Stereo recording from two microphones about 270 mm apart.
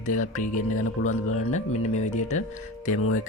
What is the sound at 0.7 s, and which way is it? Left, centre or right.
Speech, left.